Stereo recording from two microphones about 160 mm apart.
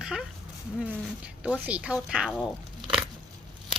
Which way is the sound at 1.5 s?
10° right (ahead or behind).